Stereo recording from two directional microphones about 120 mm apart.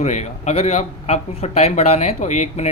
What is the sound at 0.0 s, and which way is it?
Speech, 70° left (ahead or behind).